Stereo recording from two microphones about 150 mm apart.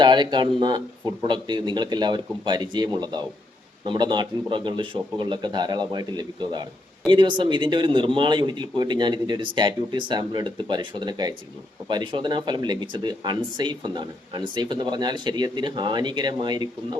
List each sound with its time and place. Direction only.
0.0 s a man's voice: 30° right (ahead or behind)